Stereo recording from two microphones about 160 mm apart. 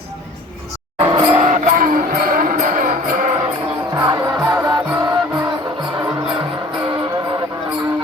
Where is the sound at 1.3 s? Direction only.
50° right (ahead or behind).